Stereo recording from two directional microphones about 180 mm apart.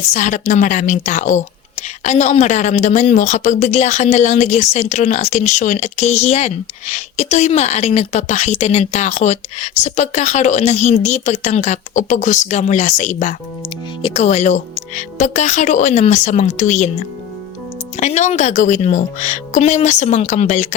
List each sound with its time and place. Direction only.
0.1 s a woman's voice: 45° left (ahead or behind)
17.9 s a woman's voice: 40° left (ahead or behind)